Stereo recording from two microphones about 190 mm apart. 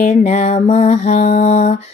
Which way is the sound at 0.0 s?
35° left (ahead or behind).